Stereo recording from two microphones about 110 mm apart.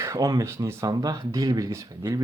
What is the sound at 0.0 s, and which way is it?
Speech, 30° right (ahead or behind).